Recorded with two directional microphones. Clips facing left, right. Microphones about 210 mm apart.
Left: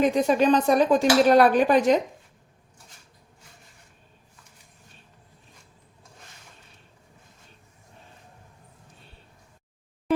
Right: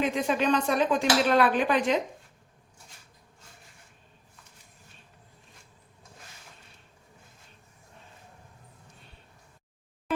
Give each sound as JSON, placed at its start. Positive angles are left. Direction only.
{"t": 0.0, "sound": "speech", "side_deg": 40}